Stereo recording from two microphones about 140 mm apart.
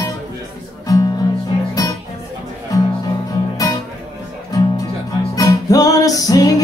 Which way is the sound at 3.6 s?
25° left (ahead or behind).